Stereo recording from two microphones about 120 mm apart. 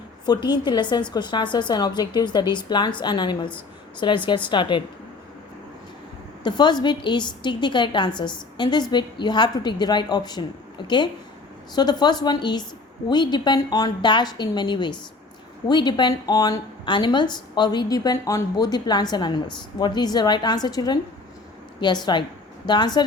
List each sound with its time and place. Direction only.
0.3 s a woman's voice: 35° left (ahead or behind)
6.4 s a woman's voice: 40° left (ahead or behind)